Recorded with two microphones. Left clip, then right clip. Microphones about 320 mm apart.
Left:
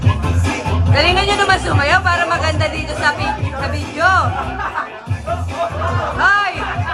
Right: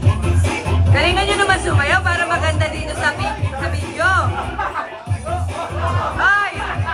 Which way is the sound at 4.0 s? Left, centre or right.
Centre.